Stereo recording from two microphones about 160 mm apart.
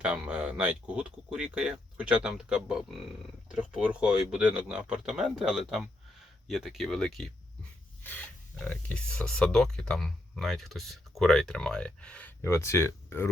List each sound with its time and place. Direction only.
0.0 s speech: 5° right (ahead or behind); by 13.3 s 15° left (ahead or behind)